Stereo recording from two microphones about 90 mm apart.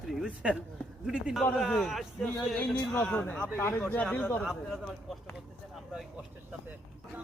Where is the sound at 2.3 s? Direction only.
10° left (ahead or behind).